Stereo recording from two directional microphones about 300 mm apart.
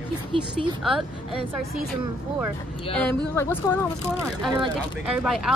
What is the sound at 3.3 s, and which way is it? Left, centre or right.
Speech, centre.